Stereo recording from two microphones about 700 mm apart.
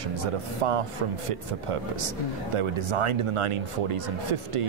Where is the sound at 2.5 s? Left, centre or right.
Right.